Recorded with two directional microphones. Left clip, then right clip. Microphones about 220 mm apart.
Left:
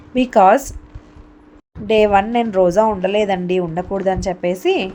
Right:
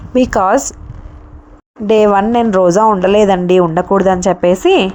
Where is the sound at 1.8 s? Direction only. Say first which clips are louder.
Right 4 dB; 25° right (ahead or behind).